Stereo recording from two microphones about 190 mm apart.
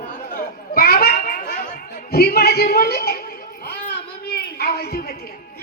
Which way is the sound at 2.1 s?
55° left (ahead or behind).